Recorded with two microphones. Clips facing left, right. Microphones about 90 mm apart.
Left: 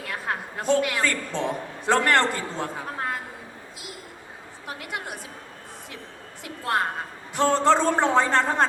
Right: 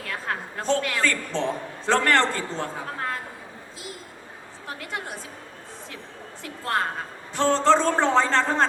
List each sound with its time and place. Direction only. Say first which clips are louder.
0.1 s a man's voice: even; 15° left (ahead or behind)
4.9 s a man's voice: even; 15° left (ahead or behind)
6.4 s a sound: left 1 dB; 15° left (ahead or behind)
7.3 s a man's voice: even; 15° left (ahead or behind)